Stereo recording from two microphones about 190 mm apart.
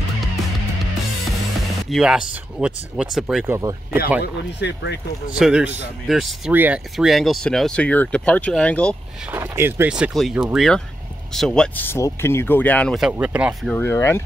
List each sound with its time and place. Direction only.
1.9 s speech: 5° right (ahead or behind)
3.5 s speech: 15° right (ahead or behind)
4.2 s speech: 65° left (ahead or behind)
5.3 s speech: 5° right (ahead or behind)
9.3 s speech: 10° right (ahead or behind)
13.7 s speech: 10° left (ahead or behind)